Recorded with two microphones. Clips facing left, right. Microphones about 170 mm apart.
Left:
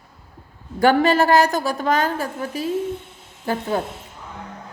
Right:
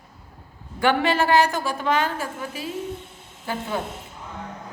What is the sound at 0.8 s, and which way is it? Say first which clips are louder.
A woman's voice: left 5 dB; 40° left (ahead or behind).